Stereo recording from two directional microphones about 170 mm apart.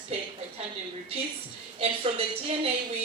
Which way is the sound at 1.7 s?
35° right (ahead or behind).